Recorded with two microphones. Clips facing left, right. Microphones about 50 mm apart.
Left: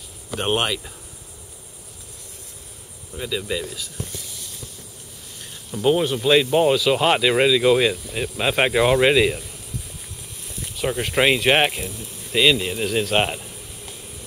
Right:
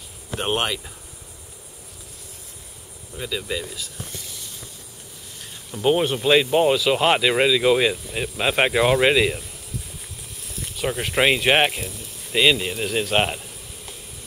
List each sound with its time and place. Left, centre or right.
0.4 s speech: centre
3.2 s speech: centre
5.4 s a sound: centre
6.2 s speech: centre